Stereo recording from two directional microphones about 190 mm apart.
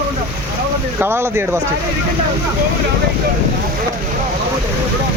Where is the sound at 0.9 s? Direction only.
10° right (ahead or behind).